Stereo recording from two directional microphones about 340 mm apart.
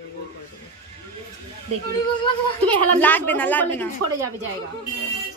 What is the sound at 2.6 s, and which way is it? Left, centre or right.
Speech, centre.